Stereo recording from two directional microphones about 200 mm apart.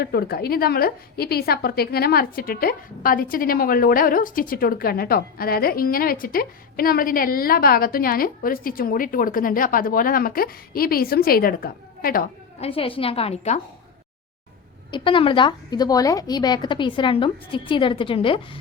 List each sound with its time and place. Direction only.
0.0 s a woman's voice: 50° left (ahead or behind)
12.5 s a woman's voice: 30° left (ahead or behind)
14.8 s a woman's voice: 25° left (ahead or behind)